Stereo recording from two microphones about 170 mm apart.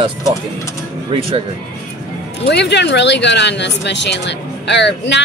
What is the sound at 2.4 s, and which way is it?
Speech, 85° left.